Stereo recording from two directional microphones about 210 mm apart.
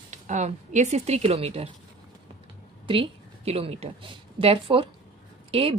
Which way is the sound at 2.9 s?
25° right (ahead or behind).